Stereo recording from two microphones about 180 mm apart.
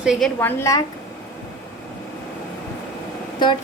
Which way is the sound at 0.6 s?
20° left (ahead or behind).